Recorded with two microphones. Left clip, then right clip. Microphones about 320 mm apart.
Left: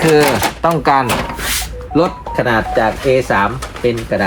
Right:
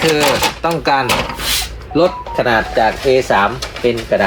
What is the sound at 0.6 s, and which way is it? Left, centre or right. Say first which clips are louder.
Speech: left 2 dB; centre.